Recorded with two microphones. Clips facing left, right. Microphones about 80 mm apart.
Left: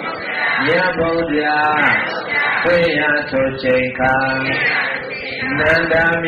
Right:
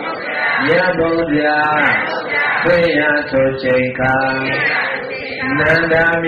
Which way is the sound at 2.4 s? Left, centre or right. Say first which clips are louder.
Right 1 dB; right.